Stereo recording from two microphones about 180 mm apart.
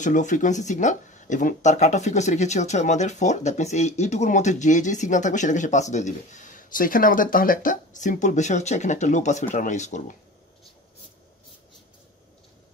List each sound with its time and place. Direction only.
0.0 s speech: 45° left (ahead or behind)